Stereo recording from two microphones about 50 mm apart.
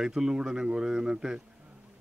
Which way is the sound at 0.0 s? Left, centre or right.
Centre.